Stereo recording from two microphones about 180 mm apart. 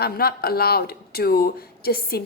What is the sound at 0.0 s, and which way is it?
Speech, 60° left (ahead or behind).